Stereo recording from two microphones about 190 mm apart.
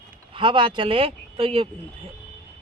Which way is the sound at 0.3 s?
25° right (ahead or behind).